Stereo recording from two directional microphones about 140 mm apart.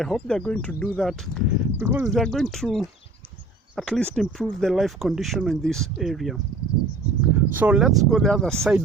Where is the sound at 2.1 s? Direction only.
Centre (ahead or behind).